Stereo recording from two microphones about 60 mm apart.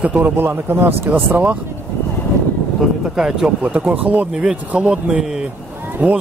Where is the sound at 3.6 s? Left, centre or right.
Right.